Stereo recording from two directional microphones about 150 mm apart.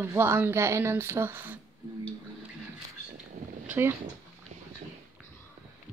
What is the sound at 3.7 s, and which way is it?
Speech, 15° right (ahead or behind).